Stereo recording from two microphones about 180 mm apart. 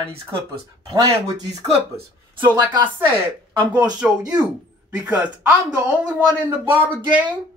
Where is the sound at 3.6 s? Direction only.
10° right (ahead or behind).